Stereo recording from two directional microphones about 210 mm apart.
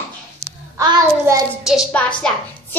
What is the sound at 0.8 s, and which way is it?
Child singing, 15° right (ahead or behind).